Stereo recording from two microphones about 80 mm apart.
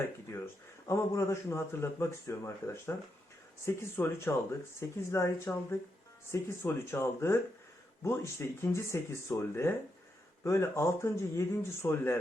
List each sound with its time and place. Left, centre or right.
0.0 s speech: left
3.9 s speech: left